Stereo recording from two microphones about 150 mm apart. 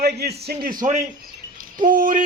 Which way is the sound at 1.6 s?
65° right (ahead or behind).